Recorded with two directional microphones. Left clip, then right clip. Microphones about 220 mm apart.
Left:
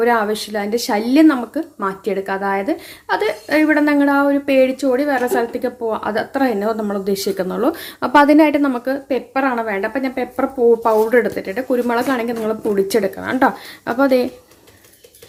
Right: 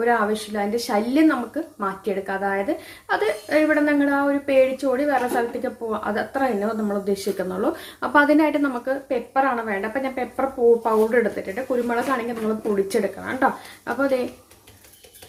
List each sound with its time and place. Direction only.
0.0 s a woman's voice: 40° left (ahead or behind)